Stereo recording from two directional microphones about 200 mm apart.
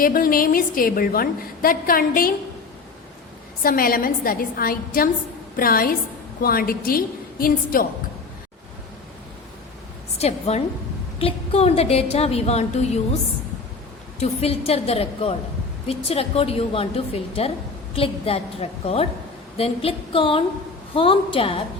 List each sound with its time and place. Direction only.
0.0 s a woman's voice: 45° left (ahead or behind)
3.6 s a woman's voice: 45° left (ahead or behind)
10.2 s a woman's voice: 30° left (ahead or behind)
14.2 s a woman's voice: 30° left (ahead or behind)
17.9 s a woman's voice: 30° left (ahead or behind)